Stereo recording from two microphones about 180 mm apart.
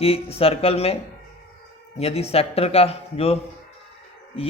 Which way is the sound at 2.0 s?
35° left (ahead or behind).